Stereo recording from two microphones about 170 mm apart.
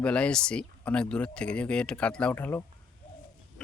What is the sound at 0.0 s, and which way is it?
Speech, 5° left (ahead or behind).